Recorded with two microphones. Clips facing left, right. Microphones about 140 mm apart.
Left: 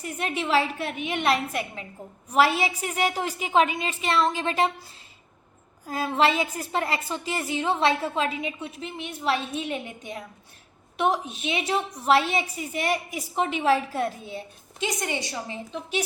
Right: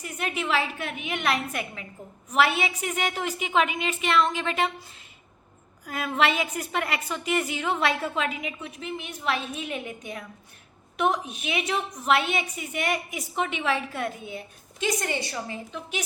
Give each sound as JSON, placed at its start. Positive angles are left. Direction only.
{"t": 0.0, "sound": "a woman's voice", "side_deg": 30}
{"t": 5.8, "sound": "a woman's voice", "side_deg": 30}
{"t": 14.8, "sound": "a woman's voice", "side_deg": 20}